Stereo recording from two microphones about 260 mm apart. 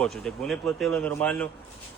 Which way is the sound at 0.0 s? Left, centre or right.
Centre.